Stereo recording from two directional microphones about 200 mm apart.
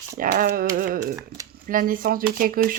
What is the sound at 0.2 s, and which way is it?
Speech, 45° right (ahead or behind).